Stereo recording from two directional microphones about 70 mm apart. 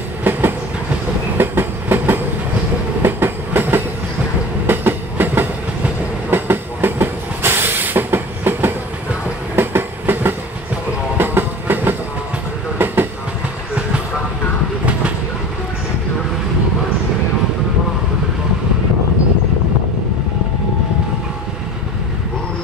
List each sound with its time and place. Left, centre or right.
0.2 s train: right
11.1 s music: right
12.7 s train: right